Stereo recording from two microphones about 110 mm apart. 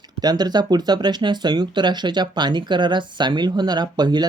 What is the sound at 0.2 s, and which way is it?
Speech, 40° right (ahead or behind).